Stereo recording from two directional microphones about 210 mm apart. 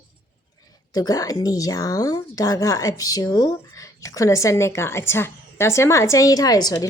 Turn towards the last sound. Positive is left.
turn(degrees=20)  # may be behind; listen again after turning